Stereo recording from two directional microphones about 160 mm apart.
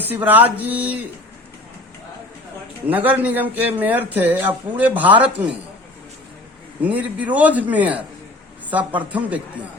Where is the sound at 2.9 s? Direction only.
10° right (ahead or behind).